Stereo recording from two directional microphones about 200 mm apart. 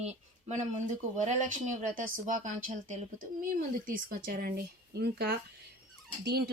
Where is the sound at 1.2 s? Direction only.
35° right (ahead or behind).